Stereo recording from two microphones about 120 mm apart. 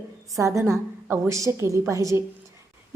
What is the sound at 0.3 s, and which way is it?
A woman's voice, 25° right (ahead or behind).